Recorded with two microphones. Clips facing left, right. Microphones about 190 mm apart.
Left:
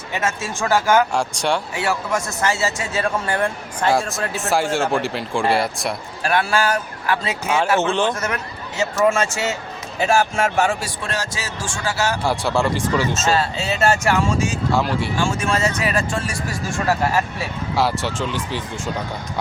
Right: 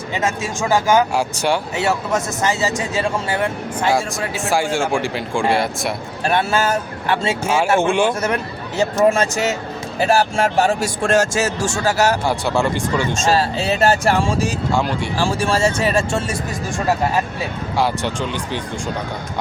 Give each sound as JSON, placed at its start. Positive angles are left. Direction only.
{"t": 0.1, "sound": "speech", "side_deg": -15}
{"t": 1.1, "sound": "speech", "side_deg": -5}
{"t": 1.7, "sound": "speech", "side_deg": -25}
{"t": 6.2, "sound": "speech", "side_deg": -25}
{"t": 7.4, "sound": "speech", "side_deg": -10}
{"t": 9.0, "sound": "speech", "side_deg": -40}
{"t": 12.2, "sound": "speech", "side_deg": 0}
{"t": 13.3, "sound": "speech", "side_deg": -35}
{"t": 14.7, "sound": "speech", "side_deg": 0}
{"t": 15.2, "sound": "speech", "side_deg": -35}
{"t": 17.7, "sound": "speech", "side_deg": 0}